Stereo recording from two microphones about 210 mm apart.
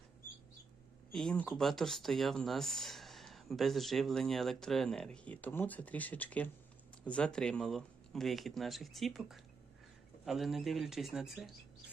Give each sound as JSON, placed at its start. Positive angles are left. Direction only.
{"t": 1.1, "sound": "speech", "side_deg": 5}